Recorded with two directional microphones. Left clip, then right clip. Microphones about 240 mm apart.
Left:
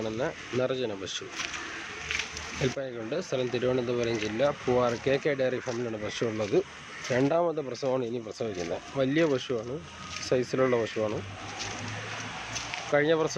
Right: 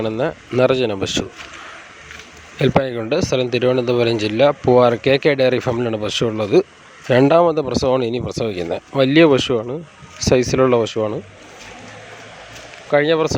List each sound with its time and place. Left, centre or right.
0.0 s speech: right
2.6 s speech: right
12.9 s speech: right